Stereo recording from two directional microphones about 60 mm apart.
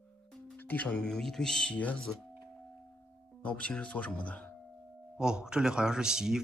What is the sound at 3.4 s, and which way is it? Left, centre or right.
Speech, left.